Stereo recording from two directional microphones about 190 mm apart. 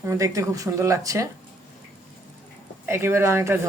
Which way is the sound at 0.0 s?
15° right (ahead or behind).